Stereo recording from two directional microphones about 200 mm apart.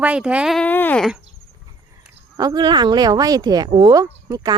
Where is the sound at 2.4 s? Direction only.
20° right (ahead or behind).